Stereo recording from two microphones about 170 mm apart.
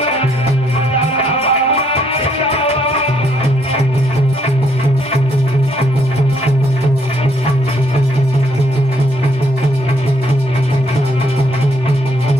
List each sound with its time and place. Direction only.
0.0 s music: 35° left (ahead or behind)